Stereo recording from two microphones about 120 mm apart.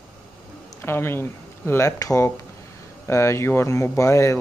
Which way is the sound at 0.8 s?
20° left (ahead or behind).